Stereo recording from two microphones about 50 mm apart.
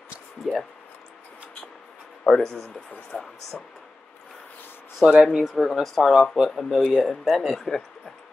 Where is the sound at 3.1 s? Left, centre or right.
Left.